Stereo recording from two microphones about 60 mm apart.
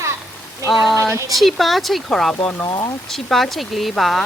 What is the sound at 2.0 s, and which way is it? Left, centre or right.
Speech, centre.